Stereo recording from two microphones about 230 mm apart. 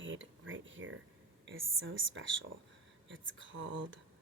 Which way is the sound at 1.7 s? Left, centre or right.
Right.